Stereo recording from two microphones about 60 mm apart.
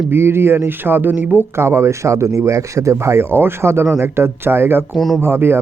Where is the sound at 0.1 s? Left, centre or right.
Right.